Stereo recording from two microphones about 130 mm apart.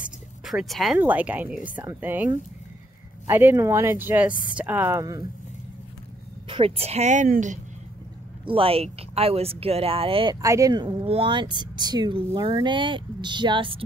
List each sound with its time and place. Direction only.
0.0 s a sound: 5° right (ahead or behind)
0.9 s speech: 10° right (ahead or behind)
3.3 s speech: 15° right (ahead or behind)
6.5 s a woman's voice: 50° right (ahead or behind); by 7.5 s 75° right (ahead or behind)
8.5 s speech: 45° right (ahead or behind)
10.4 s speech: 25° right (ahead or behind)
11.1 s speech: 40° right (ahead or behind)